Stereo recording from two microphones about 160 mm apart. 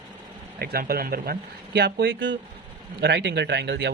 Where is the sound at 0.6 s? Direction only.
70° right (ahead or behind); by 3.9 s 90° right.